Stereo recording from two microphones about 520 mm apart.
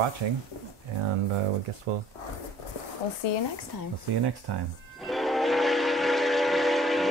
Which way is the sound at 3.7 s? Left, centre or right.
Left.